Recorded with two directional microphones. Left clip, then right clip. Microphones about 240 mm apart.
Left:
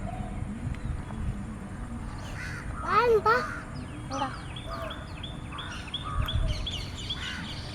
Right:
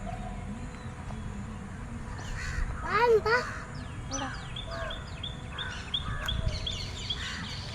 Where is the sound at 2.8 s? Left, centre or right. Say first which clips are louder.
Left 2 dB; centre.